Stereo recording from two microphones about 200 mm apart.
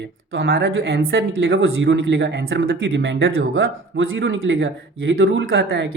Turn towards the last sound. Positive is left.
turn(degrees=-75)  # may be behind; listen again after turning